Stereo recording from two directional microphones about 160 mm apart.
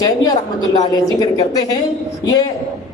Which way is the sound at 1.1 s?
25° left (ahead or behind).